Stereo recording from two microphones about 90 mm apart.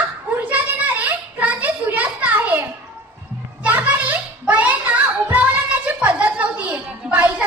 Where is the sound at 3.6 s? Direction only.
15° right (ahead or behind).